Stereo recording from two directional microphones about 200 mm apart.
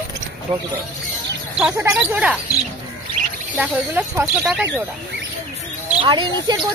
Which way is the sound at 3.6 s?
5° right (ahead or behind).